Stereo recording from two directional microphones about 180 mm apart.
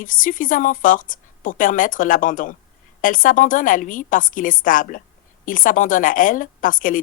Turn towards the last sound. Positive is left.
turn(degrees=50)  # may be behind; listen again after turning